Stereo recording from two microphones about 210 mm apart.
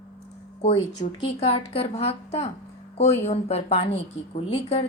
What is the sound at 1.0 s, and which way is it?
Speech, 25° left (ahead or behind).